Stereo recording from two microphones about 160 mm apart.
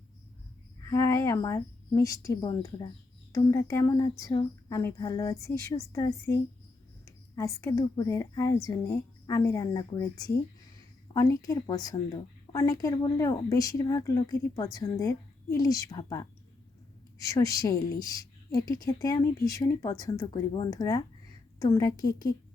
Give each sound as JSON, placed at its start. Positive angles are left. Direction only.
{"t": 0.9, "sound": "a woman's voice", "side_deg": 15}
{"t": 3.3, "sound": "a woman's voice", "side_deg": 20}
{"t": 17.2, "sound": "a woman's voice", "side_deg": 20}